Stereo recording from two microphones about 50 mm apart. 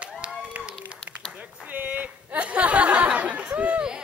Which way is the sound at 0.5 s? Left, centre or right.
Right.